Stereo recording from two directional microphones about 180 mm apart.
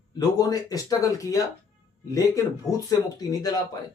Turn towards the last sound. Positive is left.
turn(degrees=20)  # may be behind; listen again after turning